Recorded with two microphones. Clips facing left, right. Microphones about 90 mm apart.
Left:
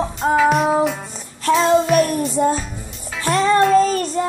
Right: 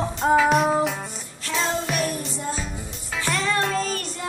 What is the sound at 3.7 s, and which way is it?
Child singing, 40° left (ahead or behind).